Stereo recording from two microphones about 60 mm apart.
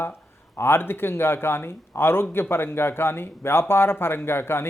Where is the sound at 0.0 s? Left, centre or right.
Left.